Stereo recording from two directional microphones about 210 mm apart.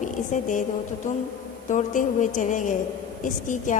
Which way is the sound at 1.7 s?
35° left (ahead or behind).